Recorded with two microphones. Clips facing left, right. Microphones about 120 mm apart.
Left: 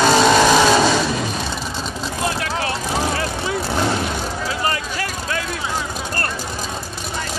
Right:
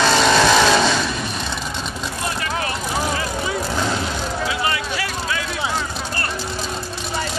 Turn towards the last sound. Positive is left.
turn(degrees=45)  # may be behind; listen again after turning